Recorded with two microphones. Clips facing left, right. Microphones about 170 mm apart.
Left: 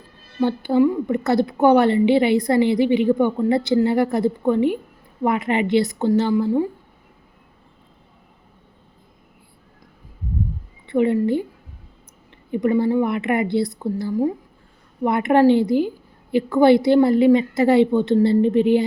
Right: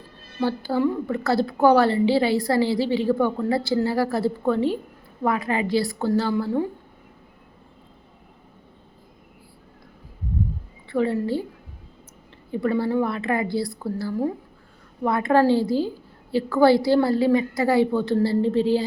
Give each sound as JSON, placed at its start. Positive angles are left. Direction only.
{"t": 0.4, "sound": "a woman's voice", "side_deg": 20}
{"t": 10.8, "sound": "a woman's voice", "side_deg": 20}
{"t": 12.5, "sound": "a woman's voice", "side_deg": 15}